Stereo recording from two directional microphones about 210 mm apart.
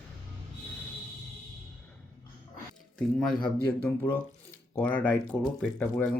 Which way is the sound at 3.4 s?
10° left (ahead or behind).